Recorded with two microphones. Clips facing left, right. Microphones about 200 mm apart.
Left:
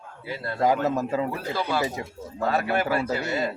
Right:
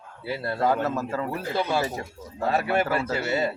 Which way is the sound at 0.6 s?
15° left (ahead or behind).